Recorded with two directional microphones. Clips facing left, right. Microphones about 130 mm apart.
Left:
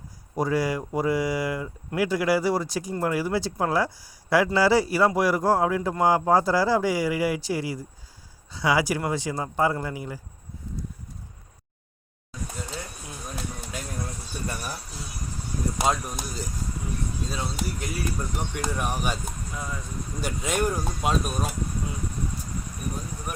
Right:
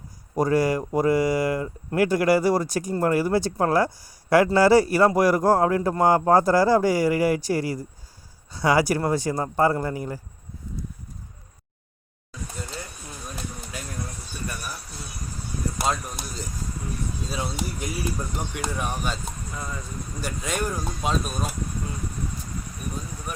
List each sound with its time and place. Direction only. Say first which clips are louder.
0.3 s a man's voice: right 4 dB; 50° right (ahead or behind)
14.4 s a sound: left 1 dB; 30° left (ahead or behind)
15.8 s speech: left 2 dB; 10° left (ahead or behind)
17.2 s speech: right 3 dB; 10° right (ahead or behind); by 19.3 s 10° left (ahead or behind)
19.5 s speech: even; centre (ahead or behind)
20.2 s speech: left 2 dB; 10° left (ahead or behind)